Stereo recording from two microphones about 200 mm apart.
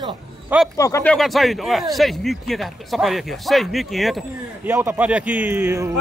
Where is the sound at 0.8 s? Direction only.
15° left (ahead or behind).